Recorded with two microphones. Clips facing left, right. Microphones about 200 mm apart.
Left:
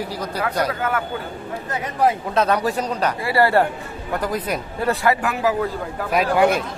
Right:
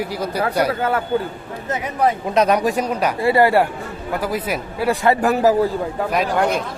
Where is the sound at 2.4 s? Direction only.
15° right (ahead or behind).